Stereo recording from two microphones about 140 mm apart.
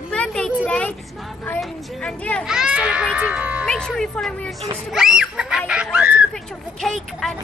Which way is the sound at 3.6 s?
5° left (ahead or behind).